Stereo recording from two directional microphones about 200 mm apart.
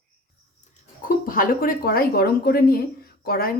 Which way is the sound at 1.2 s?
45° left (ahead or behind).